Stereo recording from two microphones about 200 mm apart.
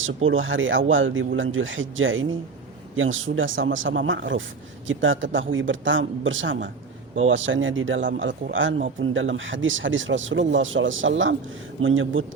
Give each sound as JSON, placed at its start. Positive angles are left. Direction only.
{"t": 0.0, "sound": "speech", "side_deg": -80}